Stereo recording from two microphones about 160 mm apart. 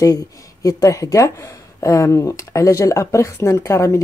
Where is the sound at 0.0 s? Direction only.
20° left (ahead or behind).